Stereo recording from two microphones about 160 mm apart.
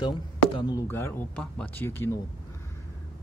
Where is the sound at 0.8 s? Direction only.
15° left (ahead or behind).